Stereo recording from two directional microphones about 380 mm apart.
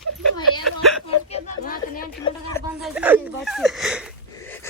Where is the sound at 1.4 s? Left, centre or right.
Left.